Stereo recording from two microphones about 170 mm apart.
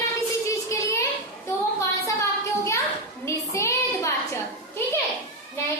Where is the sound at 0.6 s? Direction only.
20° left (ahead or behind).